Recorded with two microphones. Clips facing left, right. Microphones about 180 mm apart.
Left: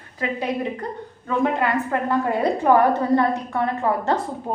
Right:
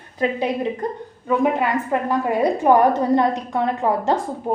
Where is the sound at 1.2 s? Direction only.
15° right (ahead or behind).